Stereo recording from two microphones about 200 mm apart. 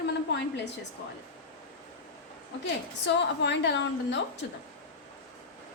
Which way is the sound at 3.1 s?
60° left (ahead or behind).